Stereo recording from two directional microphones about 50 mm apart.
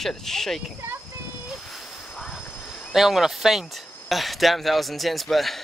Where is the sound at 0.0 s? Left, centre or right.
Centre.